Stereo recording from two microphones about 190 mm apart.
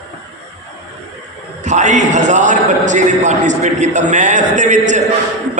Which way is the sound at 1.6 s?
40° right (ahead or behind).